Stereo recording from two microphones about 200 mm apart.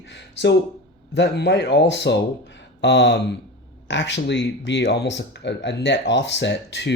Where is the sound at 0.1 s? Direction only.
60° left (ahead or behind).